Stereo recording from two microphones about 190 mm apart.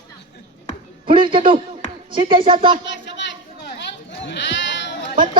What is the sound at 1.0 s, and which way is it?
Speech, 25° right (ahead or behind).